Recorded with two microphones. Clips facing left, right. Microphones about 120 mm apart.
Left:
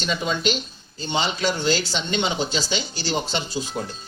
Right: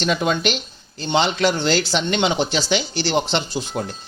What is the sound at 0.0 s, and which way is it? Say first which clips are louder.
Speech: right 4 dB; 60° right (ahead or behind).